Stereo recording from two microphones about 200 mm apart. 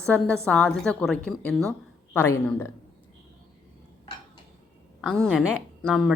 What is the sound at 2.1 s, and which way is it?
Speech, 15° left (ahead or behind).